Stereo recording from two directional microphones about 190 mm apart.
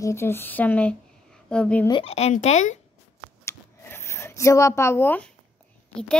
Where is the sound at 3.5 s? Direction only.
15° left (ahead or behind).